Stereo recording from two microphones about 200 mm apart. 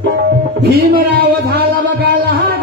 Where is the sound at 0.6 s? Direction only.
50° right (ahead or behind).